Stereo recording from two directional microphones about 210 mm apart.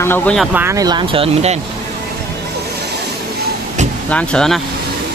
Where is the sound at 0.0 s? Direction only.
10° left (ahead or behind).